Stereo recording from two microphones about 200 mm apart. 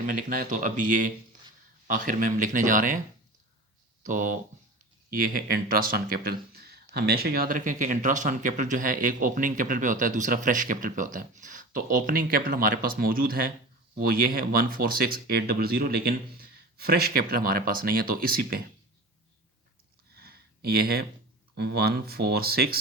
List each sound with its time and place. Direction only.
0.0 s speech: 45° right (ahead or behind)
4.0 s speech: 40° right (ahead or behind)
20.1 s a sound: 50° right (ahead or behind)
21.5 s speech: 55° right (ahead or behind)